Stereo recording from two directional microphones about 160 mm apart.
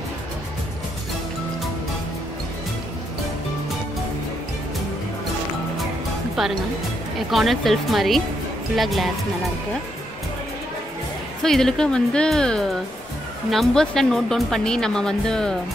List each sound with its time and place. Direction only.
7.2 s speech: centre (ahead or behind)
11.4 s speech: 5° left (ahead or behind)